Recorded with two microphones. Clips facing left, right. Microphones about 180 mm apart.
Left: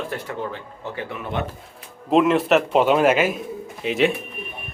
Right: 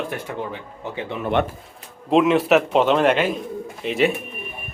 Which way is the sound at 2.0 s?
Centre (ahead or behind).